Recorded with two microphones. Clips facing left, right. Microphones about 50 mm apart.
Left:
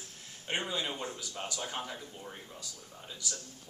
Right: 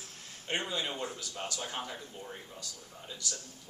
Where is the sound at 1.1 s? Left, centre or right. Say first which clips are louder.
Even; centre.